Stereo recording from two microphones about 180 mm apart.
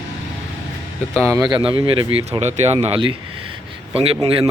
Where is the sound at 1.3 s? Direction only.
20° right (ahead or behind).